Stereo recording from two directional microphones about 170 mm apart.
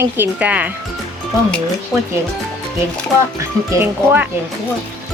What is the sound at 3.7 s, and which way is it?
Speech, 10° right (ahead or behind).